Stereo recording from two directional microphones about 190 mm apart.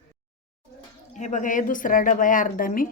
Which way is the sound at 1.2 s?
40° left (ahead or behind).